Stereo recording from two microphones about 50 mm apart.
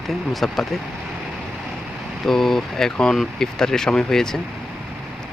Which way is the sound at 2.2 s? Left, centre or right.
Centre.